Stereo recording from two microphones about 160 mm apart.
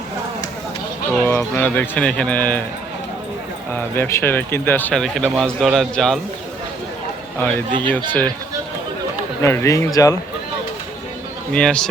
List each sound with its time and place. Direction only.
1.2 s speech: 15° left (ahead or behind)
3.8 s speech: 15° left (ahead or behind)
7.8 s speech: 10° left (ahead or behind)
9.4 s speech: 15° left (ahead or behind)
11.5 s speech: 5° left (ahead or behind)